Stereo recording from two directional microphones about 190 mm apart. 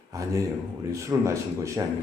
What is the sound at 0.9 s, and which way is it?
Speech, 15° right (ahead or behind).